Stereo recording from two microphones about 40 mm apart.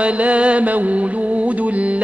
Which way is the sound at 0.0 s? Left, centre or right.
Right.